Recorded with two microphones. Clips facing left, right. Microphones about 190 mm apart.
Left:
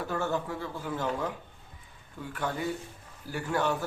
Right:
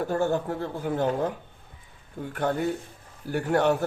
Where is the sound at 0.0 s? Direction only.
50° right (ahead or behind).